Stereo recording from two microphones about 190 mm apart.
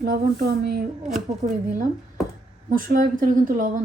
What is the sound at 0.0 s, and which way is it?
Speech, 55° right (ahead or behind).